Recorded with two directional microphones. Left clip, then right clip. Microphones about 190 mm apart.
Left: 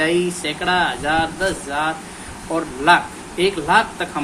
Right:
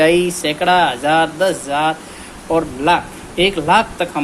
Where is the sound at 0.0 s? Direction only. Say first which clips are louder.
Right 6 dB; 35° right (ahead or behind).